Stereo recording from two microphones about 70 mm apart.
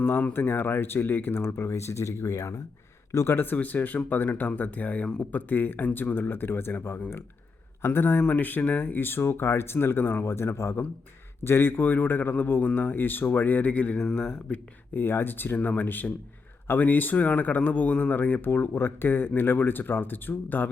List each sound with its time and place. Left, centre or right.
0.0 s a man's voice: left
8.2 s speech: left
14.9 s speech: left